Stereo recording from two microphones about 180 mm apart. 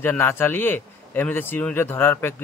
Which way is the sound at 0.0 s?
10° left (ahead or behind).